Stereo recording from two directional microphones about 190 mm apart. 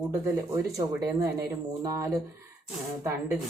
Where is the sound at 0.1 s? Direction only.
15° right (ahead or behind).